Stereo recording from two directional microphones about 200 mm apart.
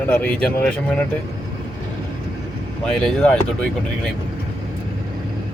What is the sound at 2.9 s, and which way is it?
Speech, 5° left (ahead or behind).